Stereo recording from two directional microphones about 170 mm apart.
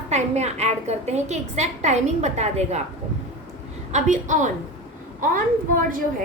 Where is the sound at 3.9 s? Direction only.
45° right (ahead or behind).